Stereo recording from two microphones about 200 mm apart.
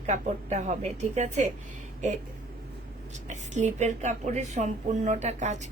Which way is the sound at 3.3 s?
35° right (ahead or behind).